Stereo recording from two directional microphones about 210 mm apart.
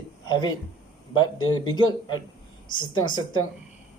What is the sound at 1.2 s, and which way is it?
Speech, 20° left (ahead or behind).